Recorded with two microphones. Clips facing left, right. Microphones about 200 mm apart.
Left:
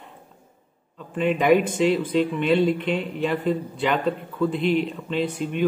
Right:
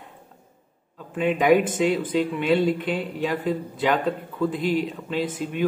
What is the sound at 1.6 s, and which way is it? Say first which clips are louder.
Speech: left 1 dB; 50° right (ahead or behind).